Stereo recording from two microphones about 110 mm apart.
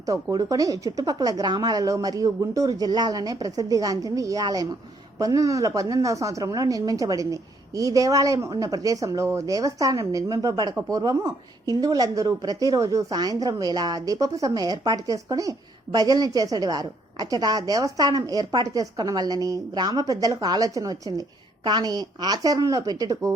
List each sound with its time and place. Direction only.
0.0 s a woman's voice: 35° right (ahead or behind)